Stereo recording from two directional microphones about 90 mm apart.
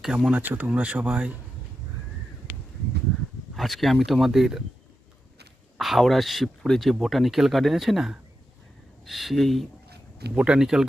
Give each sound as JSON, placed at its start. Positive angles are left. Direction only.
{"t": 0.0, "sound": "speech", "side_deg": -5}
{"t": 3.5, "sound": "speech", "side_deg": 0}
{"t": 5.7, "sound": "speech", "side_deg": 0}
{"t": 10.3, "sound": "speech", "side_deg": -10}